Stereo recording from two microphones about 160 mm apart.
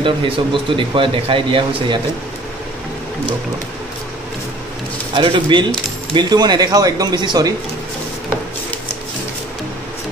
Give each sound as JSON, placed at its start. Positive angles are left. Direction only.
{"t": 0.0, "sound": "speech", "side_deg": -30}
{"t": 5.1, "sound": "speech", "side_deg": -30}